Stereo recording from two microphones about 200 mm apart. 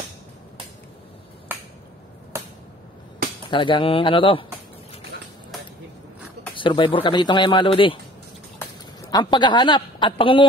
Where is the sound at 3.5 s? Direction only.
25° left (ahead or behind).